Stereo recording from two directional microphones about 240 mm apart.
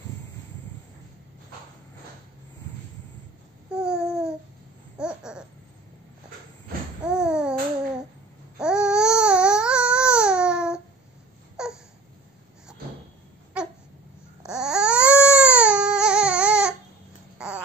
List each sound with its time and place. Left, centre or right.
3.7 s babbling: centre
7.0 s babbling: centre
8.5 s babbling: centre
14.4 s babbling: centre
17.4 s a sound: centre